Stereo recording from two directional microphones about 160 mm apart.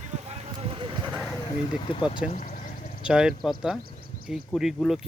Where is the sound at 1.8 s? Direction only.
35° left (ahead or behind).